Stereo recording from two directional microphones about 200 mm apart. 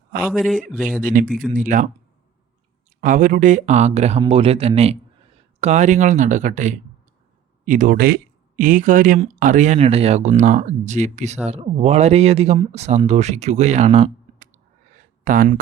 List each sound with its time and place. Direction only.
0.3 s speech: centre (ahead or behind)
1.0 s speech: 40° right (ahead or behind)
3.0 s speech: 40° right (ahead or behind)